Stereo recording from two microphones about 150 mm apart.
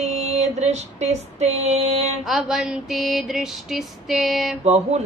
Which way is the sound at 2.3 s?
5° right (ahead or behind).